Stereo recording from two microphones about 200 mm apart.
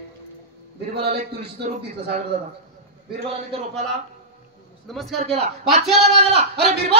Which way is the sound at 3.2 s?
30° right (ahead or behind).